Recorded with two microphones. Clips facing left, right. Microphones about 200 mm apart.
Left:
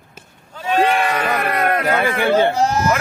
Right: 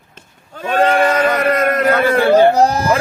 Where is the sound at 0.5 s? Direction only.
50° right (ahead or behind).